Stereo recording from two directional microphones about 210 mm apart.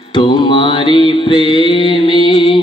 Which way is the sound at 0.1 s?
25° left (ahead or behind).